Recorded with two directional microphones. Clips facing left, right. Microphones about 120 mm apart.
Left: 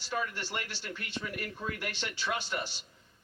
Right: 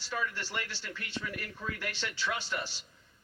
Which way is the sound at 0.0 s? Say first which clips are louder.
Left 1 dB; 20° left (ahead or behind).